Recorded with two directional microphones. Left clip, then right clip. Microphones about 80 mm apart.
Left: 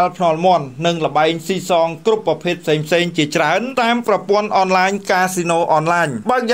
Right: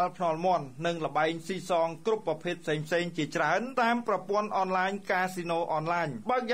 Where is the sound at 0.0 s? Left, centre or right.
Centre.